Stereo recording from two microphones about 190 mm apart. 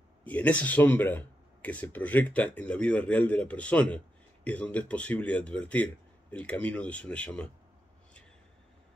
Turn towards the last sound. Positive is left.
turn(degrees=5)  # may be behind; listen again after turning